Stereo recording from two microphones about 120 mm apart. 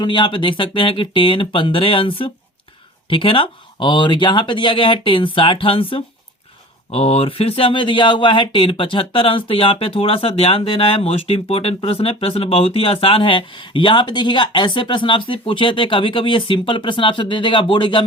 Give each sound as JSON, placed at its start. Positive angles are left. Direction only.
{"t": 0.0, "sound": "speech", "side_deg": 40}
{"t": 6.9, "sound": "speech", "side_deg": 55}